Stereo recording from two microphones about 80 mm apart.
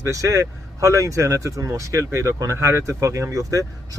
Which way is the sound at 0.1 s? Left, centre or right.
Right.